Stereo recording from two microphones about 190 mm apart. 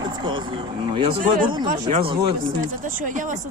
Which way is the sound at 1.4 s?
25° right (ahead or behind).